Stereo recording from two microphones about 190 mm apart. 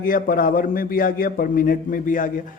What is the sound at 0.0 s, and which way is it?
A man's voice, 50° left (ahead or behind).